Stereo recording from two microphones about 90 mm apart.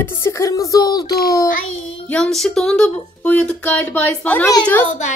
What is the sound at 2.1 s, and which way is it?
Speech, 5° left (ahead or behind).